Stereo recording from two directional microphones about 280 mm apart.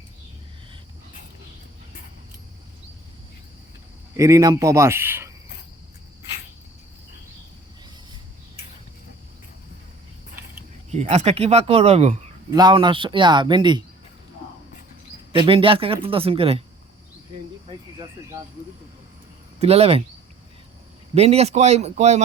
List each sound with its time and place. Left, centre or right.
4.2 s speech: centre
10.9 s speech: right
15.4 s speech: centre
19.5 s speech: right
21.2 s speech: right